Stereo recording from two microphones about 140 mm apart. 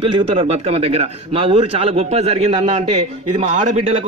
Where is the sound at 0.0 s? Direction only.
45° right (ahead or behind).